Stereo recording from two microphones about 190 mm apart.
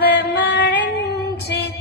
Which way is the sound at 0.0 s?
60° left (ahead or behind).